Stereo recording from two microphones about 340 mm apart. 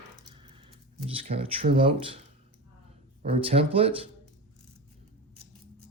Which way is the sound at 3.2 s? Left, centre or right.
Centre.